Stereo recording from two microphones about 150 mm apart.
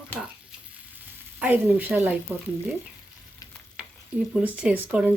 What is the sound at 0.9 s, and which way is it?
Frying, 10° right (ahead or behind).